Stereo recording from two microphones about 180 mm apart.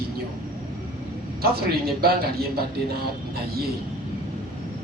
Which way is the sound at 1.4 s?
60° right (ahead or behind).